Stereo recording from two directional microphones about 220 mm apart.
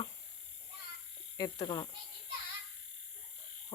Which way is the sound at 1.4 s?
20° left (ahead or behind).